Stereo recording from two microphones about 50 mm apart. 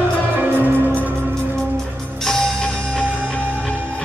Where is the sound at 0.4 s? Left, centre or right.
Right.